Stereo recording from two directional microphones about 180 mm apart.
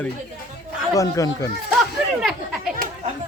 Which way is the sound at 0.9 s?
20° left (ahead or behind).